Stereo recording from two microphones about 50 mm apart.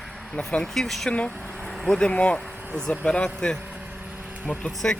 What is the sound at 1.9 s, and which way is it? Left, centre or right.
Speech, left.